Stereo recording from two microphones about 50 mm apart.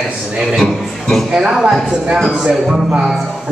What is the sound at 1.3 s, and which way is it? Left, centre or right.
A man's voice, centre.